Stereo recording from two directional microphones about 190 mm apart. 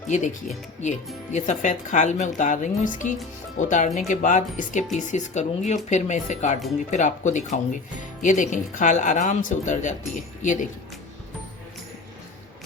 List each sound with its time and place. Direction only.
0.1 s speech: 40° left (ahead or behind)